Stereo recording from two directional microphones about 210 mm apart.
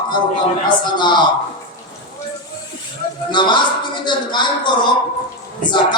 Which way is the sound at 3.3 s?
20° left (ahead or behind).